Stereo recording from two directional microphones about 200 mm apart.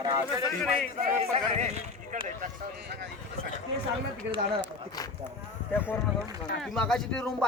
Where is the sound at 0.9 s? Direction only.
35° right (ahead or behind).